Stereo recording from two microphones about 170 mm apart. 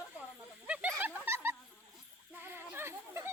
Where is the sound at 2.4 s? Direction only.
15° right (ahead or behind).